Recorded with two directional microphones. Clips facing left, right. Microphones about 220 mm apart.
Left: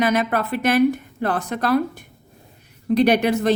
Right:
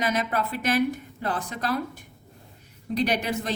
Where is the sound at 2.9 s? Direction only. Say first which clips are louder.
Left 9 dB; 65° left (ahead or behind).